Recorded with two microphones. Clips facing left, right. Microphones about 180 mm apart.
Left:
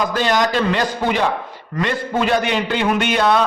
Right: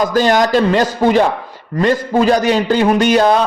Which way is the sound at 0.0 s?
45° right (ahead or behind).